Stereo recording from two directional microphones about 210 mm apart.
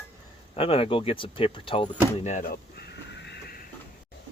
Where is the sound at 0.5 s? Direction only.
25° left (ahead or behind).